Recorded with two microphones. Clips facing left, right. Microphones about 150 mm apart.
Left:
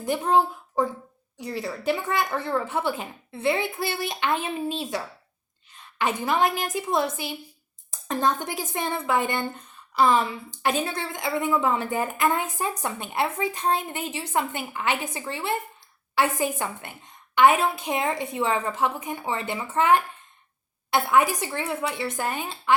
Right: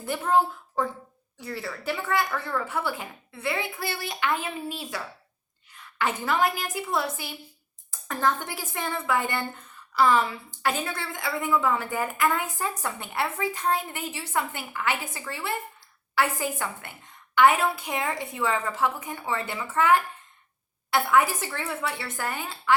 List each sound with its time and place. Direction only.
0.0 s a woman's voice: 20° left (ahead or behind)